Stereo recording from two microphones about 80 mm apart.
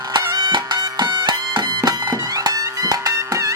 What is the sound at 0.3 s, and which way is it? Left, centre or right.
Music, right.